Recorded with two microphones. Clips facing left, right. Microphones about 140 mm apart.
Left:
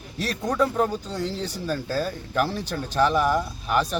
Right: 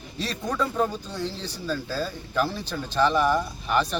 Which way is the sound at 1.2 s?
45° left (ahead or behind).